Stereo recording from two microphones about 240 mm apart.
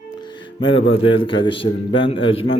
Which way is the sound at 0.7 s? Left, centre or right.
Left.